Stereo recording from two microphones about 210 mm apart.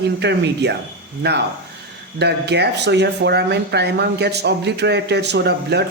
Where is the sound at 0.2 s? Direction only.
55° right (ahead or behind).